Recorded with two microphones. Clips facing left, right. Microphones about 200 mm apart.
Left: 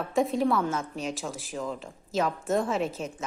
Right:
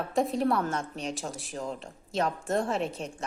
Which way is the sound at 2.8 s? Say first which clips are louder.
Left 2 dB; centre (ahead or behind).